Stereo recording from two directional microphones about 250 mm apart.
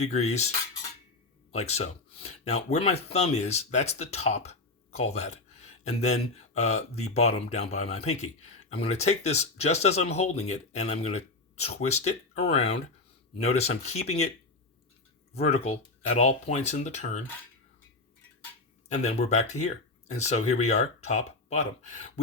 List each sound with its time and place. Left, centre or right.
0.0 s speech: left
1.5 s speech: left
15.3 s speech: left
18.9 s speech: left